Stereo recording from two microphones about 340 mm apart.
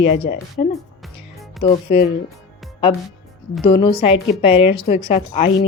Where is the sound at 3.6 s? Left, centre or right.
Centre.